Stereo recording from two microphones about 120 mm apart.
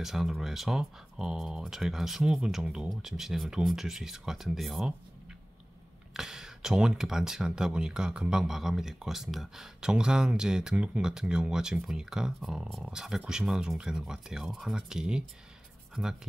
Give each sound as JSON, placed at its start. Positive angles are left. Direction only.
{"t": 0.0, "sound": "speech", "side_deg": 0}
{"t": 6.1, "sound": "speech", "side_deg": -5}